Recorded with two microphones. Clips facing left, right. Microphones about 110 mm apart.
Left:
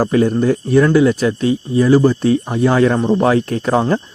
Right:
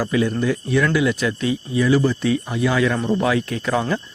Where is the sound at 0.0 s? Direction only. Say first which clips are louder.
Left 6 dB; 45° left (ahead or behind).